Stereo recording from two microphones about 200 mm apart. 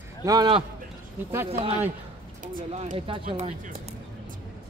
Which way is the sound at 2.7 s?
30° right (ahead or behind).